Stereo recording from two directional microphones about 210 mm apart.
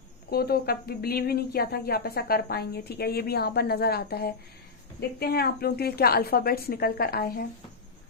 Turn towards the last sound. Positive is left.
turn(degrees=45)  # may be behind; listen again after turning